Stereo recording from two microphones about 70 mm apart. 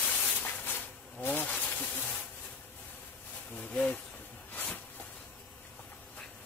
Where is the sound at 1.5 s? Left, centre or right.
Centre.